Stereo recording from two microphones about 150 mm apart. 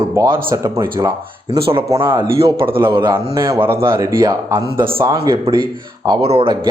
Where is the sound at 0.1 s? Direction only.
20° right (ahead or behind).